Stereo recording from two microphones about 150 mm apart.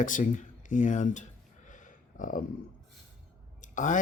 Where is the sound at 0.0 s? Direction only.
60° left (ahead or behind).